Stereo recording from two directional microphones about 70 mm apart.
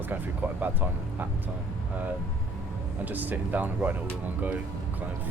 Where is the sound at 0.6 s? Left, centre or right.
Right.